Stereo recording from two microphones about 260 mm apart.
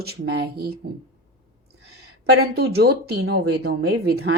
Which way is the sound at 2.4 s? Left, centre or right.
Right.